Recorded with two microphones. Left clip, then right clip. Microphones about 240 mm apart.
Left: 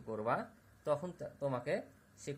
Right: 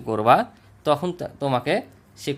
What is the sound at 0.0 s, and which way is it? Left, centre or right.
Speech, right.